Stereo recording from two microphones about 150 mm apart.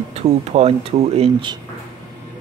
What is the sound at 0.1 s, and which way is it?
Speech, 45° right (ahead or behind).